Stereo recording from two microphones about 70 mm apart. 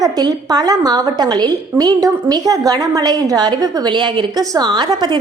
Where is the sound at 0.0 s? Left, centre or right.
Right.